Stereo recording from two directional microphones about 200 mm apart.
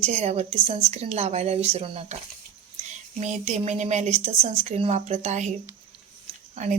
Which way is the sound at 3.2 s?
35° right (ahead or behind).